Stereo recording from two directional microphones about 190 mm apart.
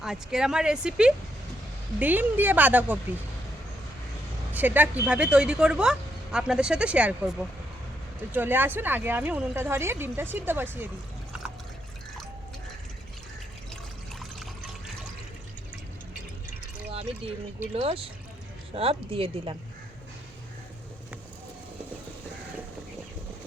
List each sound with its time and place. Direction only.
0.0 s speech: 5° right (ahead or behind)
4.5 s speech: 10° right (ahead or behind)
16.9 s speech: 30° right (ahead or behind)